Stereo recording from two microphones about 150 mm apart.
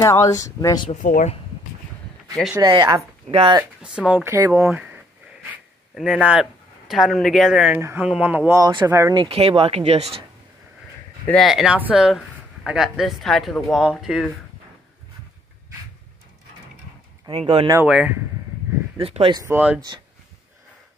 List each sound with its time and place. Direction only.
0.0 s speech: 20° left (ahead or behind)
1.0 s speech: 60° left (ahead or behind)
2.5 s speech: 25° right (ahead or behind)
3.5 s speech: 5° right (ahead or behind)
4.6 s speech: 5° right (ahead or behind)
6.9 s speech: centre (ahead or behind)
8.5 s speech: 25° right (ahead or behind)
9.2 s speech: 40° right (ahead or behind)
11.2 s speech: centre (ahead or behind)
17.3 s speech: 40° right (ahead or behind)
17.8 s speech: 5° right (ahead or behind)
18.9 s speech: 40° right (ahead or behind)
19.3 s speech: 15° right (ahead or behind)